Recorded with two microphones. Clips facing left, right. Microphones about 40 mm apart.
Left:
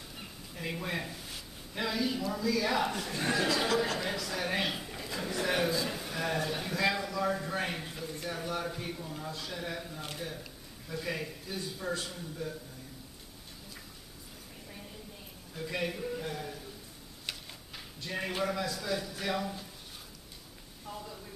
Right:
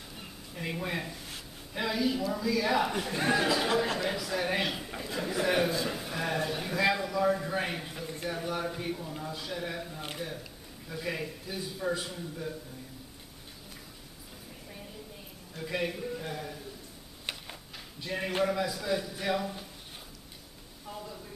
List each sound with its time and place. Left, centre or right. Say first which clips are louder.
0.6 s speech: right 2 dB; centre
2.9 s speech: right 4 dB; centre
4.0 s a man's voice: right 3 dB; centre
15.5 s speech: right 2 dB; centre
17.3 s tick-tock: right 2 dB; right
18.0 s a man's voice: right 4 dB; centre
20.8 s a sound: right 1 dB; centre